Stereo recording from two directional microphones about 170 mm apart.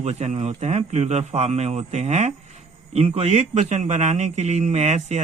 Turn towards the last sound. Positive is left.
turn(degrees=-40)  # may be behind; listen again after turning